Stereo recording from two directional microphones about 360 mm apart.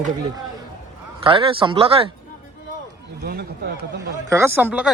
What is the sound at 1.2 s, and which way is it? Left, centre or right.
Speech, centre.